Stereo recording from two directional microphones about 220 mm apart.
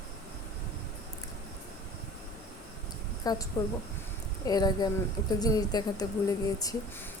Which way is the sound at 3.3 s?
20° left (ahead or behind).